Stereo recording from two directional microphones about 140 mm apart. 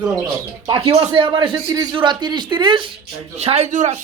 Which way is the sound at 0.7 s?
40° right (ahead or behind).